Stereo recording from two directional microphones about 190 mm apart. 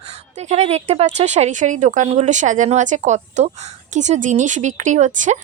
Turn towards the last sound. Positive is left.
turn(degrees=-40)  # may be behind; listen again after turning